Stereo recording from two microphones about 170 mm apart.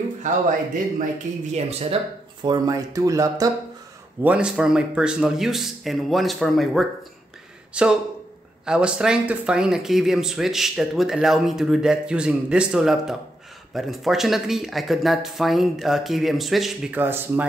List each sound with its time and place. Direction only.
0.2 s speech: 45° right (ahead or behind)
1.5 s speech: 35° right (ahead or behind)
2.4 s speech: 20° right (ahead or behind)
4.2 s speech: 5° right (ahead or behind)